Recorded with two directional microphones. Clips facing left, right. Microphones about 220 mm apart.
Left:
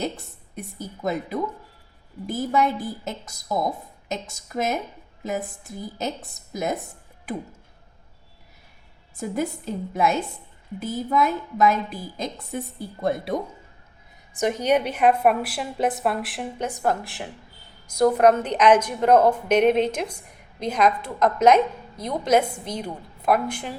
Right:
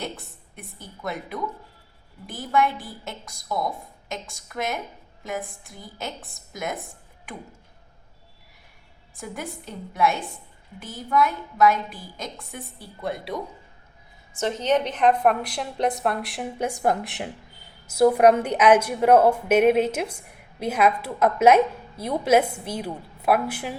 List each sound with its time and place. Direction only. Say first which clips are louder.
0.5 s a woman's voice: left 8 dB; 40° left (ahead or behind)
9.2 s a woman's voice: left 8 dB; 40° left (ahead or behind)
14.3 s a woman's voice: left 2 dB; 10° left (ahead or behind)
16.6 s a woman's voice: right 1 dB; 15° right (ahead or behind)
17.8 s a woman's voice: right 1 dB; 5° right (ahead or behind)